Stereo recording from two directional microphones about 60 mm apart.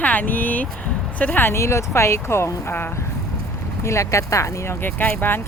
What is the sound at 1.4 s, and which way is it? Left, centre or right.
Speech, left.